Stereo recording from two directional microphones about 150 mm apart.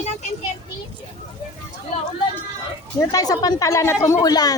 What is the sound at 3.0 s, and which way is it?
A child's voice, 25° left (ahead or behind).